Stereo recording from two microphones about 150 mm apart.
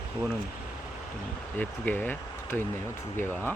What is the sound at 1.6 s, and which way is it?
Speech, 10° left (ahead or behind).